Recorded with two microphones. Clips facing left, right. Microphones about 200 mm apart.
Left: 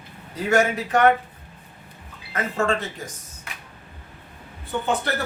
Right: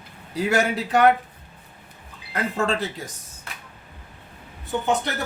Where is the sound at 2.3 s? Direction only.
35° right (ahead or behind).